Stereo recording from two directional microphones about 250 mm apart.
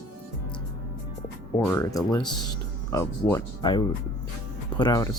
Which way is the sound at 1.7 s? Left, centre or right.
Centre.